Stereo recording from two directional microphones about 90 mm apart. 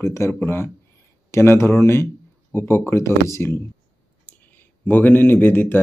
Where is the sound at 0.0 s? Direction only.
30° left (ahead or behind).